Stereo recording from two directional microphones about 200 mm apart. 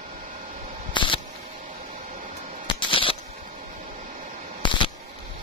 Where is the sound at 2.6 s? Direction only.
25° left (ahead or behind).